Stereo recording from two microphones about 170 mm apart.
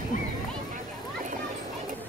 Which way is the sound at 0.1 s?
50° left (ahead or behind).